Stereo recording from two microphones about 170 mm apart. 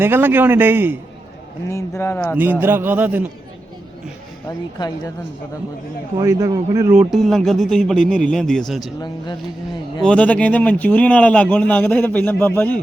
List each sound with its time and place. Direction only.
0.0 s a man's voice: 10° right (ahead or behind)
1.7 s a man's voice: 15° left (ahead or behind)
2.3 s a man's voice: 10° right (ahead or behind)
4.4 s speech: 20° left (ahead or behind)
6.1 s a man's voice: 15° right (ahead or behind)
7.1 s a man's voice: centre (ahead or behind)
9.0 s speech: 25° left (ahead or behind)
10.0 s a man's voice: 5° left (ahead or behind)